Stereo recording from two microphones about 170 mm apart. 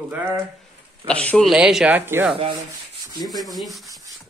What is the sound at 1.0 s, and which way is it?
Speech, 5° left (ahead or behind).